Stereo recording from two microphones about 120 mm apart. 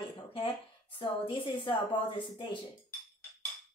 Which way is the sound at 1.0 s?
45° left (ahead or behind).